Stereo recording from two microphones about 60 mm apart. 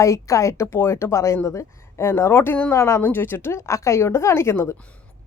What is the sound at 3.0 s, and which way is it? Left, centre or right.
Speech, left.